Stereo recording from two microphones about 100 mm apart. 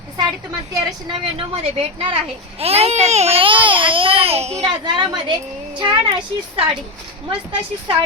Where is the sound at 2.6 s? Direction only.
90° right.